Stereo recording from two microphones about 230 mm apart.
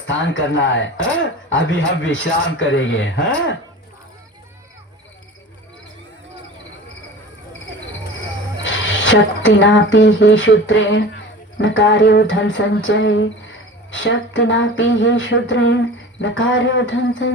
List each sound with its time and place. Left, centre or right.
0.1 s speech: left
8.5 s speech: left